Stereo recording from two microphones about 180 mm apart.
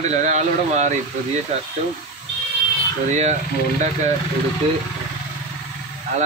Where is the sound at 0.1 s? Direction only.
40° right (ahead or behind).